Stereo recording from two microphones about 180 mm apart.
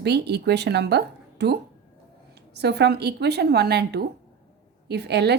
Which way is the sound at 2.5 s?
70° right (ahead or behind).